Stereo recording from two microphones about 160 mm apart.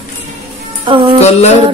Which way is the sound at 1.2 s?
45° left (ahead or behind).